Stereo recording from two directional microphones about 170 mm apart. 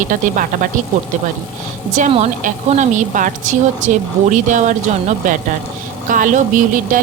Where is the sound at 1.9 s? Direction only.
45° right (ahead or behind).